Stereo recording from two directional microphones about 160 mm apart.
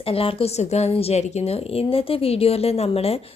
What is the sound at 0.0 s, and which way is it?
A woman's voice, 35° left (ahead or behind).